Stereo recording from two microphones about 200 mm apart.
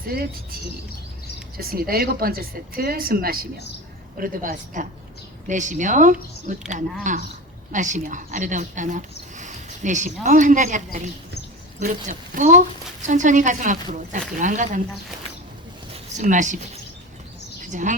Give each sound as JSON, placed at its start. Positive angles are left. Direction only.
{"t": 0.1, "sound": "speech", "side_deg": -55}
{"t": 1.5, "sound": "speech", "side_deg": -50}
{"t": 16.1, "sound": "speech", "side_deg": -40}
{"t": 17.7, "sound": "speech", "side_deg": -40}